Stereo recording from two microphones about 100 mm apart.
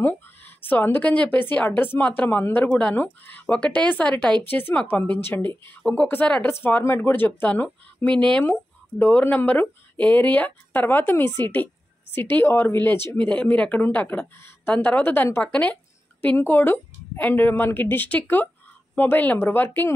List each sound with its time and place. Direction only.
0.0 s speech: 20° left (ahead or behind)